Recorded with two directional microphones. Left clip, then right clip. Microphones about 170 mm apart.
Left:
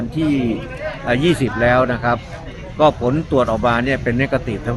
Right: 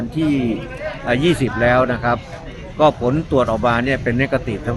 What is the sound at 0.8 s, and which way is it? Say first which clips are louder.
A man's voice: even; 15° left (ahead or behind).